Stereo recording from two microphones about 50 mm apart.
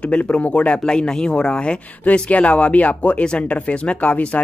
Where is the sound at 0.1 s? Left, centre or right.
Left.